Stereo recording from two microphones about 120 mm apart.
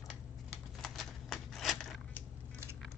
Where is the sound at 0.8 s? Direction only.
Centre (ahead or behind).